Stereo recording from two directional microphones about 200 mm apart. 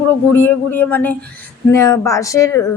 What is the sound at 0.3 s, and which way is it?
Speech, 10° left (ahead or behind).